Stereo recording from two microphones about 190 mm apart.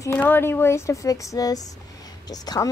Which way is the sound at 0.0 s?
10° left (ahead or behind).